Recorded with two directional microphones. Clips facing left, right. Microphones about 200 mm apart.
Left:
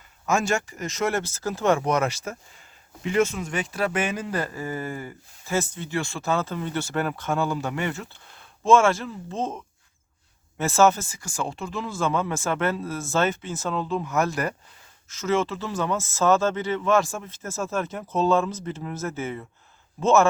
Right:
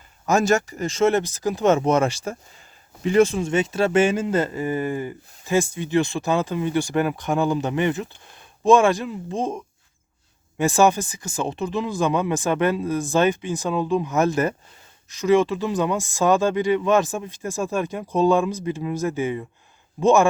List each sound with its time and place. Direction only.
0.3 s speech: 40° right (ahead or behind); by 20.2 s 15° right (ahead or behind)